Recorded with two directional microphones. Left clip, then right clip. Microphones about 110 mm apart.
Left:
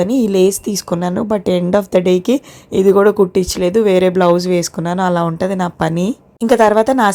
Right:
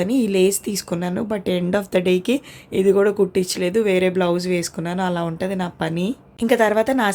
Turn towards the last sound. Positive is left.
turn(degrees=45)  # may be behind; listen again after turning